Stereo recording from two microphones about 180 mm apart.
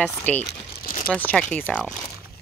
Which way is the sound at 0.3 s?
10° left (ahead or behind).